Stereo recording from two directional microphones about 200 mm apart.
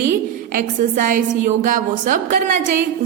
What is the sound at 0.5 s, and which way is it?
A woman's voice, 40° right (ahead or behind).